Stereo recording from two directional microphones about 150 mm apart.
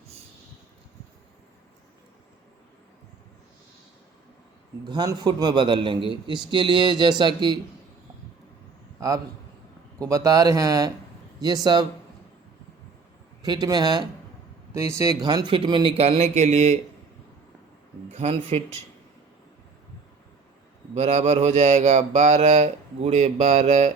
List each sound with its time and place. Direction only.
4.9 s a man's voice: 30° right (ahead or behind)
9.0 s a man's voice: 20° right (ahead or behind)
13.4 s a man's voice: 25° right (ahead or behind); by 16.7 s 50° right (ahead or behind)
18.1 s mantra: 45° right (ahead or behind)
20.9 s mantra: 45° right (ahead or behind)